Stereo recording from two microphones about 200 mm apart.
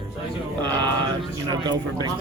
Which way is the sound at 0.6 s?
20° right (ahead or behind).